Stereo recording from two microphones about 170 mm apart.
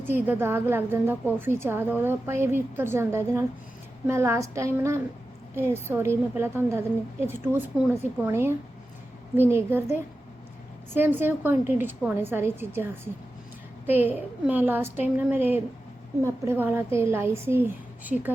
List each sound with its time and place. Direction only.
0.0 s a woman's voice: 10° right (ahead or behind)
10.9 s a woman's voice: 10° right (ahead or behind)